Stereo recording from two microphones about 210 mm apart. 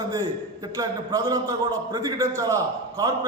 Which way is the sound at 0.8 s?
15° right (ahead or behind).